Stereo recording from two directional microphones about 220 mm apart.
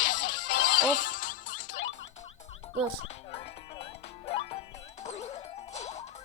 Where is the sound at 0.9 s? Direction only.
40° left (ahead or behind).